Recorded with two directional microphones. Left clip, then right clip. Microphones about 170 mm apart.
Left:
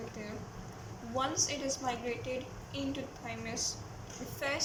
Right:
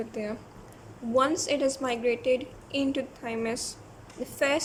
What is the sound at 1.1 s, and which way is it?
A woman's voice, 90° right.